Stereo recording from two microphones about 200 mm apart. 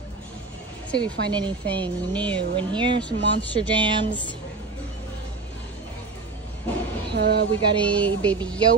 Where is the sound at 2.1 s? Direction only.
5° left (ahead or behind).